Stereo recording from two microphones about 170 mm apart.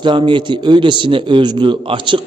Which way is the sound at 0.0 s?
30° right (ahead or behind).